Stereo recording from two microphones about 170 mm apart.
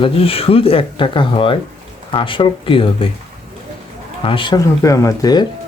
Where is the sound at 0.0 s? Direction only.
35° left (ahead or behind).